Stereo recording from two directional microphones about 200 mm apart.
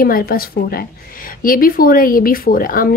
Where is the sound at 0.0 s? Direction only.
45° left (ahead or behind).